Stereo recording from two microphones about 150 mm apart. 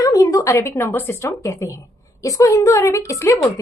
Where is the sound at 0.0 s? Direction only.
25° left (ahead or behind).